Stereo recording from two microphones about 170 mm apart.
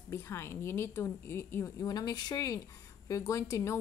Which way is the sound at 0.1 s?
15° left (ahead or behind).